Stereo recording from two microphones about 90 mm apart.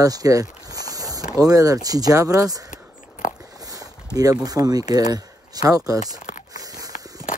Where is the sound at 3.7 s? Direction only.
40° right (ahead or behind).